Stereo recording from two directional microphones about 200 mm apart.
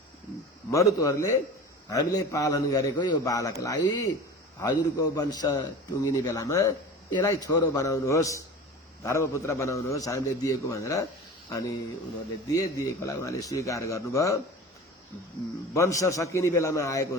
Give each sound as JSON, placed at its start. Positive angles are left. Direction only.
{"t": 0.7, "sound": "a man's voice", "side_deg": 15}
{"t": 12.5, "sound": "a man's voice", "side_deg": 15}
{"t": 15.7, "sound": "a man's voice", "side_deg": 15}